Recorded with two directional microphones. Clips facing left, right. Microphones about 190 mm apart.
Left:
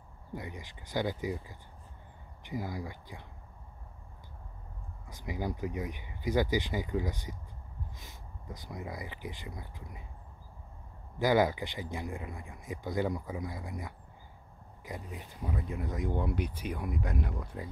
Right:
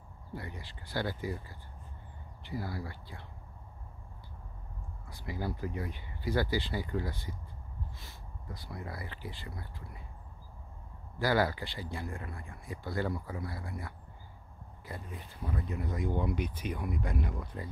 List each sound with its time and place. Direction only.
0.3 s speech: 15° left (ahead or behind)
5.1 s speech: 15° left (ahead or behind)
11.1 s speech: 20° left (ahead or behind)
15.9 s speech: centre (ahead or behind)
16.9 s speech: centre (ahead or behind)